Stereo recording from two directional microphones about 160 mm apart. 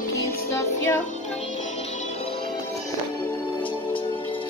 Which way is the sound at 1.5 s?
45° left (ahead or behind).